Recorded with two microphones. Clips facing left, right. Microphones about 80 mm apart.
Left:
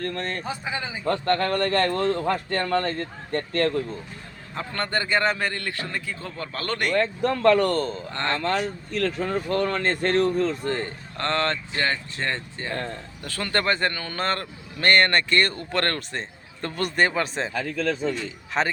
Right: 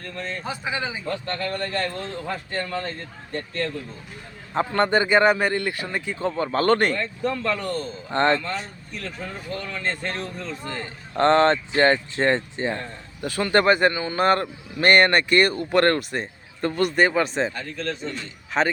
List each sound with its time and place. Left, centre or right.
0.0 s speech: left
4.7 s speech: centre
6.1 s speech: right
6.9 s speech: left
8.1 s speech: right
8.4 s speech: left
10.7 s a man's voice: left
11.2 s speech: right; by 17.5 s centre
18.5 s a man's voice: centre